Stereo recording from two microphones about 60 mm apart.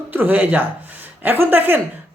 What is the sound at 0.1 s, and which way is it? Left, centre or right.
A woman's voice, right.